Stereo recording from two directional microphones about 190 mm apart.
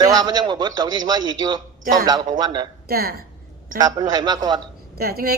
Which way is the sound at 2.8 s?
55° right (ahead or behind).